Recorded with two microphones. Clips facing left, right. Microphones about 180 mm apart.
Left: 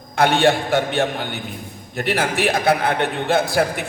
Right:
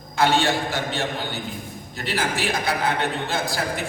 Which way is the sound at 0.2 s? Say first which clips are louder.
Left 4 dB; 60° left (ahead or behind).